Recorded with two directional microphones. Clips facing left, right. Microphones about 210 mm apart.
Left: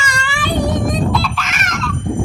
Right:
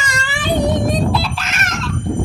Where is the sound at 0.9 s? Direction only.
35° right (ahead or behind).